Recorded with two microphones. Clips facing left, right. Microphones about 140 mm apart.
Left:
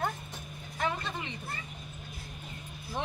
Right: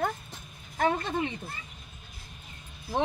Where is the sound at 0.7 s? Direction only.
55° right (ahead or behind).